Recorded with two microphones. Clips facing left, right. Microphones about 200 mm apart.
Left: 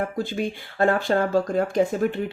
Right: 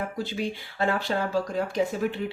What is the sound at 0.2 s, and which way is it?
Speech, 50° left (ahead or behind).